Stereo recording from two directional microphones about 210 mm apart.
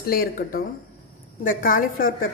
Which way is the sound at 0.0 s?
45° left (ahead or behind).